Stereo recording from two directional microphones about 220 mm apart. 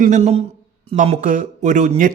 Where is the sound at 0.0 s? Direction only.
30° right (ahead or behind).